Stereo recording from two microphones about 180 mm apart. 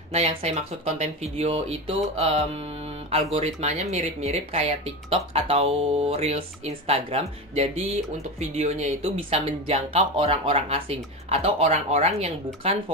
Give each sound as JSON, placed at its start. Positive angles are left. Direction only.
{"t": 0.1, "sound": "speech", "side_deg": -35}